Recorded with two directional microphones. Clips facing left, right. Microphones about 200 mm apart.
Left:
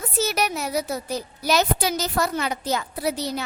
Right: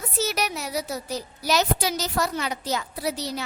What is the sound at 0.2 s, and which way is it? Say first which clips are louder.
A woman's voice: left 3 dB; 50° left (ahead or behind).